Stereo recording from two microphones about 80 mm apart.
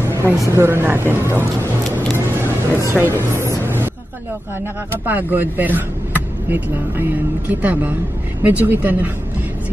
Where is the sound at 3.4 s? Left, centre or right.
Right.